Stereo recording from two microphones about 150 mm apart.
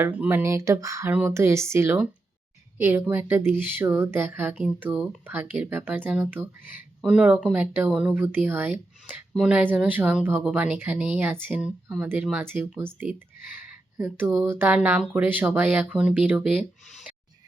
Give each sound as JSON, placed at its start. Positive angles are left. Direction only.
{"t": 0.0, "sound": "speech", "side_deg": -15}
{"t": 13.6, "sound": "a sound", "side_deg": -10}
{"t": 14.3, "sound": "speech", "side_deg": -15}